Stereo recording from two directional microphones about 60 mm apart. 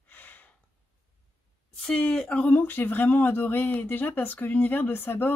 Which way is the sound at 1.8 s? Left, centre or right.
Centre.